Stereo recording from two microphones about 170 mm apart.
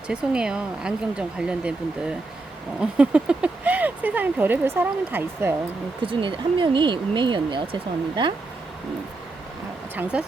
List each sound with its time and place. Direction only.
0.1 s speech: 5° right (ahead or behind)
6.0 s speech: 30° right (ahead or behind)
9.9 s speech: 10° right (ahead or behind)